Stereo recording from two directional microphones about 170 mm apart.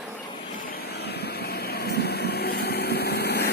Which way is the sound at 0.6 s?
65° left (ahead or behind).